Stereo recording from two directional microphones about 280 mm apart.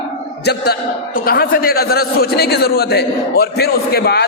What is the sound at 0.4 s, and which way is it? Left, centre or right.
Speech, left.